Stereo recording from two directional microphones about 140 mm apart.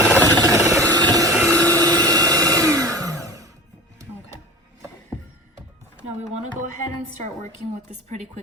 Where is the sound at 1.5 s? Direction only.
10° left (ahead or behind).